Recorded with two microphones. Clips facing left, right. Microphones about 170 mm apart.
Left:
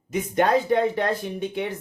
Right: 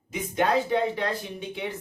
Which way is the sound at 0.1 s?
50° left (ahead or behind).